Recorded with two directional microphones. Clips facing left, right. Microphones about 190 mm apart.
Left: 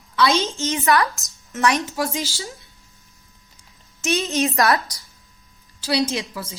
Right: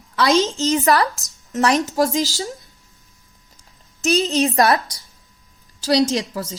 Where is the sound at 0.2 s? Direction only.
35° right (ahead or behind).